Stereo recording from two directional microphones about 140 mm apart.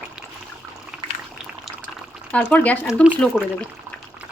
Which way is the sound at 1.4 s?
5° right (ahead or behind).